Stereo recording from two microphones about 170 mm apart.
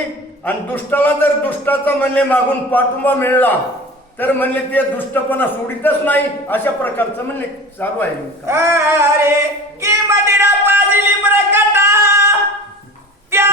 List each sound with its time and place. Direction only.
0.4 s a man's voice: 10° left (ahead or behind)
8.4 s female singing: 15° right (ahead or behind)
9.8 s a sound: 15° right (ahead or behind)